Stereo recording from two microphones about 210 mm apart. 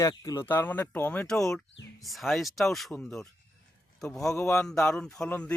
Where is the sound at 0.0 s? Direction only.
15° left (ahead or behind).